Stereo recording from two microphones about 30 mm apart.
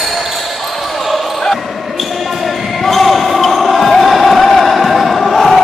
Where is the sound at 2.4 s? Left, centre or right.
Centre.